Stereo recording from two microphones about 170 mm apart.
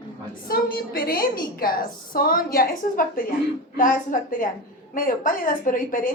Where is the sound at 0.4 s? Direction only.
60° left (ahead or behind).